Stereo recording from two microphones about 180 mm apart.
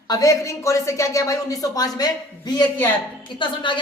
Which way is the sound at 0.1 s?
20° left (ahead or behind).